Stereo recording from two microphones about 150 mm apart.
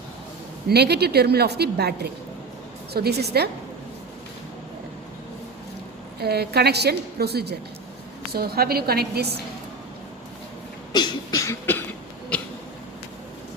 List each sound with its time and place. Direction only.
0.7 s a woman's voice: 90° right
6.1 s a woman's voice: 90° right
10.9 s cough: 25° left (ahead or behind)